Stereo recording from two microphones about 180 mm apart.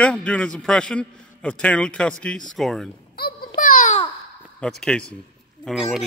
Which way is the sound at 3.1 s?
60° left (ahead or behind).